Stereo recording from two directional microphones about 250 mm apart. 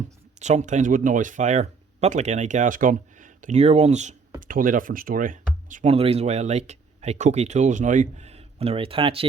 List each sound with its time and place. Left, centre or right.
0.3 s speech: right